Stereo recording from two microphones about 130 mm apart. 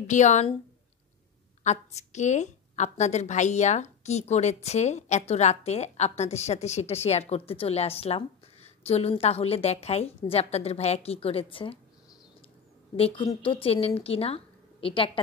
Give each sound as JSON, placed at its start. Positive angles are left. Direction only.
{"t": 0.0, "sound": "a woman's voice", "side_deg": 65}
{"t": 1.6, "sound": "a woman's voice", "side_deg": 60}
{"t": 12.9, "sound": "a woman's voice", "side_deg": 45}